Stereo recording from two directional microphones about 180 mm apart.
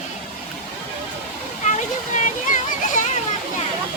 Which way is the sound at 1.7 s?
40° left (ahead or behind).